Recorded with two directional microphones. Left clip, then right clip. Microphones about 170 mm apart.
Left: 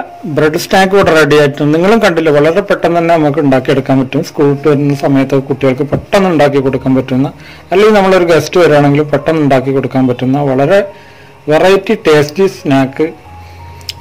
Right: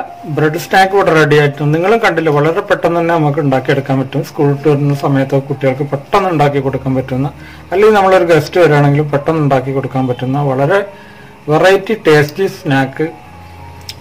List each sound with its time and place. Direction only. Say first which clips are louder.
0.4 s a man's voice: left 1 dB; 60° left (ahead or behind)